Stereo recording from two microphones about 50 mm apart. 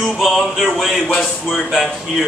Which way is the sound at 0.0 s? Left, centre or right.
Centre.